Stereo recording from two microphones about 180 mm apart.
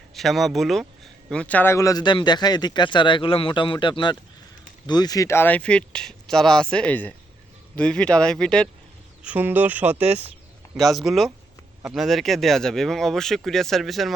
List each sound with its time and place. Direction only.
0.1 s speech: centre (ahead or behind)
9.2 s speech: 10° right (ahead or behind)